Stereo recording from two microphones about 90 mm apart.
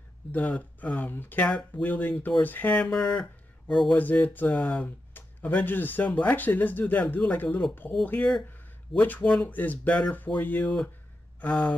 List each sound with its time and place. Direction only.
0.3 s speech: 20° left (ahead or behind)
3.9 s speech: 20° left (ahead or behind)
10.6 s speech: 10° left (ahead or behind)